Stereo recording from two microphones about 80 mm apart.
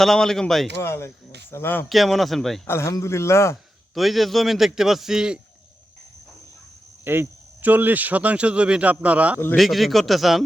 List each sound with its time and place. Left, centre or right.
0.0 s a man's voice: centre
0.8 s speech: left
1.9 s a man's voice: centre
2.6 s speech: left
3.9 s a man's voice: centre
7.0 s speech: right
9.6 s a man's voice: centre